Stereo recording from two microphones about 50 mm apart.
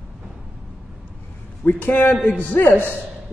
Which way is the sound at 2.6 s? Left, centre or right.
Left.